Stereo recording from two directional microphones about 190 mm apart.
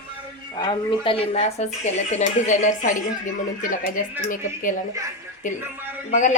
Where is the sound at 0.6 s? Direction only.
25° left (ahead or behind).